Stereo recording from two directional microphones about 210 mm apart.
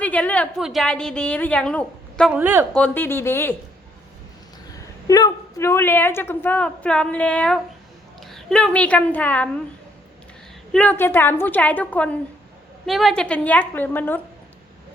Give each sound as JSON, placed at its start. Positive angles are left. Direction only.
{"t": 0.0, "sound": "a woman's voice", "side_deg": 5}
{"t": 2.3, "sound": "speech", "side_deg": -10}
{"t": 2.7, "sound": "a woman's voice", "side_deg": 10}
{"t": 5.0, "sound": "a woman's voice", "side_deg": 15}
{"t": 10.7, "sound": "a woman's voice", "side_deg": 5}